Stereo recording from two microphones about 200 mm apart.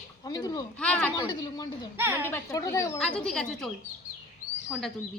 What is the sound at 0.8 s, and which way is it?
Speech, 5° left (ahead or behind).